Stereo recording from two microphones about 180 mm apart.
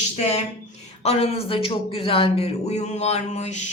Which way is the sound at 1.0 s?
35° left (ahead or behind).